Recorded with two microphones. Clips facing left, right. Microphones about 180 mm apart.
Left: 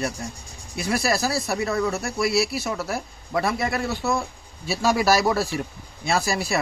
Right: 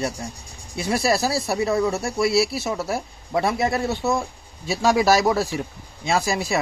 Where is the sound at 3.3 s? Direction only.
25° right (ahead or behind).